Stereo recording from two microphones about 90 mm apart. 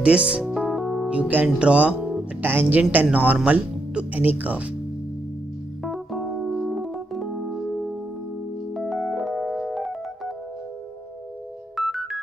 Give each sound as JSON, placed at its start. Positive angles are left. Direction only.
{"t": 0.0, "sound": "speech", "side_deg": -10}
{"t": 0.6, "sound": "music", "side_deg": -5}
{"t": 1.1, "sound": "speech", "side_deg": -15}
{"t": 5.9, "sound": "keyboard", "side_deg": 0}
{"t": 8.7, "sound": "piano", "side_deg": 0}
{"t": 11.7, "sound": "music", "side_deg": 0}